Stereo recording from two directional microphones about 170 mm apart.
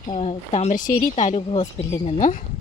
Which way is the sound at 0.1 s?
35° left (ahead or behind).